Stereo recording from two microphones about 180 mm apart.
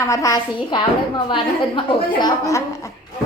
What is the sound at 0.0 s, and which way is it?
A woman's voice, 15° left (ahead or behind).